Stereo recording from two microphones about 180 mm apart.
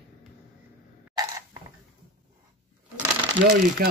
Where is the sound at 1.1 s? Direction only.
20° right (ahead or behind).